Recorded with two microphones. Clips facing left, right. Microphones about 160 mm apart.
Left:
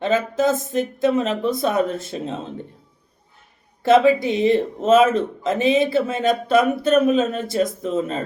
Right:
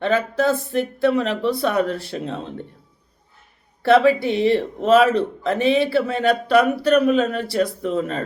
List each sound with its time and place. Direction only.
0.0 s speech: 20° left (ahead or behind)
3.8 s speech: 20° left (ahead or behind)